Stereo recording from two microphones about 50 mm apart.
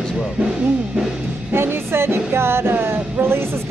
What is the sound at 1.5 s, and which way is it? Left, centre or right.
Music, right.